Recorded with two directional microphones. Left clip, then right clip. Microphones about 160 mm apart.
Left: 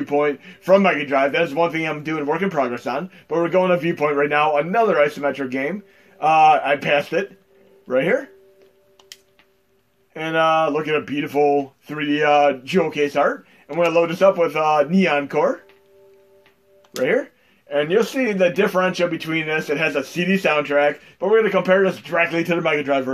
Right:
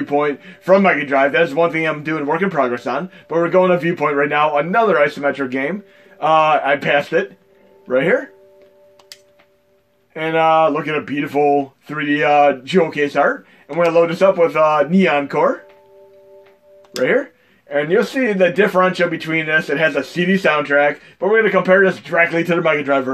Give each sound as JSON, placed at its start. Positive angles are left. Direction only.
{"t": 0.0, "sound": "a man's voice", "side_deg": -30}
{"t": 10.1, "sound": "a man's voice", "side_deg": -25}
{"t": 16.9, "sound": "speech", "side_deg": -20}
{"t": 17.6, "sound": "a man's voice", "side_deg": -35}